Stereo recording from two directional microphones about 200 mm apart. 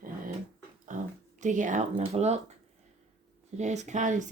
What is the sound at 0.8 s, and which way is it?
Speech, 40° right (ahead or behind).